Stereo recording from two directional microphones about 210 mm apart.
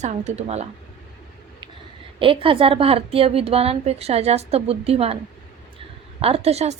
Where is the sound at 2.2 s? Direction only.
25° right (ahead or behind).